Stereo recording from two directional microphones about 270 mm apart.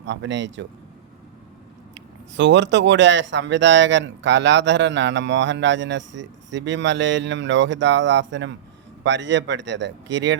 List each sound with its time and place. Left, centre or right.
0.0 s speech: right
2.3 s speech: right